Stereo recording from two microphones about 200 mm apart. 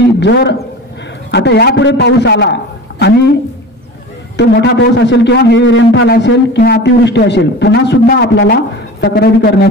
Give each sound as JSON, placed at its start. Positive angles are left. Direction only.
{"t": 0.2, "sound": "a man's voice", "side_deg": 60}
{"t": 4.4, "sound": "a man's voice", "side_deg": 60}